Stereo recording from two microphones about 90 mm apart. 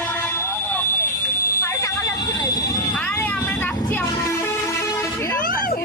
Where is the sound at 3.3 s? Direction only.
40° left (ahead or behind).